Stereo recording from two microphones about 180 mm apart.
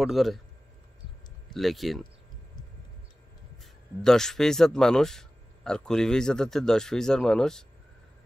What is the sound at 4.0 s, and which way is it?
Speech, 5° left (ahead or behind).